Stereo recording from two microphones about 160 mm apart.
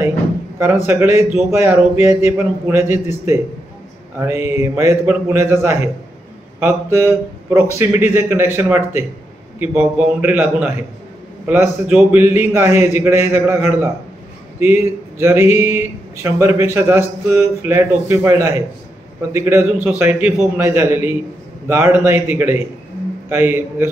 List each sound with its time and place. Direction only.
0.8 s speech: 15° right (ahead or behind)